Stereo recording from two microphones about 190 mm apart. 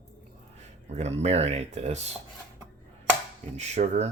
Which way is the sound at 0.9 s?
35° right (ahead or behind).